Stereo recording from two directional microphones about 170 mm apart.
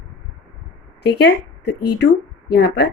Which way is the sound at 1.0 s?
75° left (ahead or behind).